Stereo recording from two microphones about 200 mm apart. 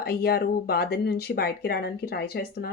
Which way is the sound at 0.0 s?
50° left (ahead or behind).